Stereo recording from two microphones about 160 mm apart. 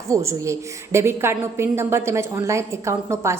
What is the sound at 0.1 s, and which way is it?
A woman's voice, 20° right (ahead or behind).